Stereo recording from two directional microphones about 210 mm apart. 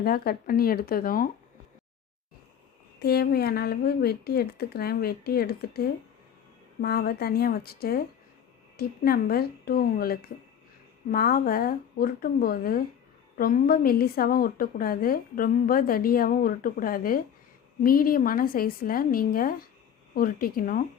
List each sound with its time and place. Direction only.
0.0 s a woman's voice: 45° left (ahead or behind)
3.0 s a woman's voice: 50° left (ahead or behind)